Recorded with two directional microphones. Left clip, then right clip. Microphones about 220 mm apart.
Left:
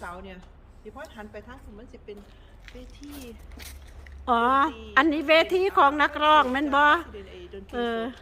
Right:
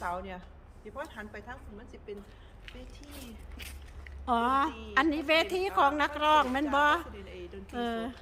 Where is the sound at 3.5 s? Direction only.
25° left (ahead or behind).